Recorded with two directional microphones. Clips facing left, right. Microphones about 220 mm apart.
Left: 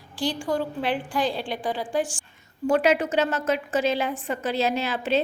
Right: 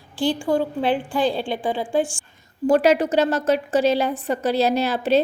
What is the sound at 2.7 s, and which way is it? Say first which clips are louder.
A woman's voice: right 4 dB; 35° right (ahead or behind).